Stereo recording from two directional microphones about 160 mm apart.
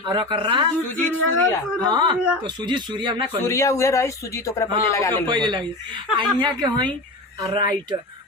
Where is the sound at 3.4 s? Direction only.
20° left (ahead or behind).